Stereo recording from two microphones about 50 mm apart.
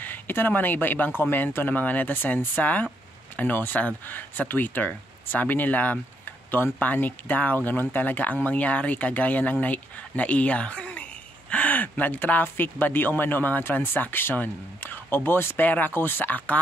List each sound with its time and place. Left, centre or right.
0.0 s speech: left
15.6 s speech: left